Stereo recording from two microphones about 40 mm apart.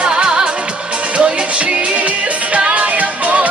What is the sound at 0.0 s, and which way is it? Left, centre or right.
Music, right.